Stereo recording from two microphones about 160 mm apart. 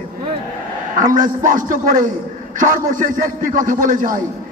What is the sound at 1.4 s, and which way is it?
A man's voice, 55° right (ahead or behind).